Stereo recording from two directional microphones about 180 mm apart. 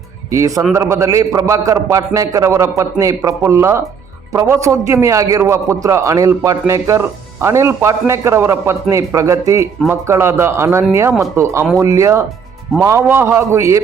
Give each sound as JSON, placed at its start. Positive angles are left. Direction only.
{"t": 0.3, "sound": "a man's voice", "side_deg": -15}